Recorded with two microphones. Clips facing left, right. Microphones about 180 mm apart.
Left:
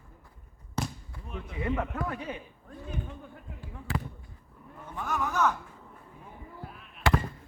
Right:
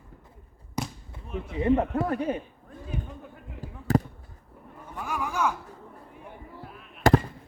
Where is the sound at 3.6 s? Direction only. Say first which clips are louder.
Right 10 dB; 40° right (ahead or behind).